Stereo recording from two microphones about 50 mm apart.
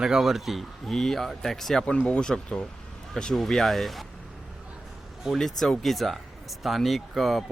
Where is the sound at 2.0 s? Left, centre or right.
Centre.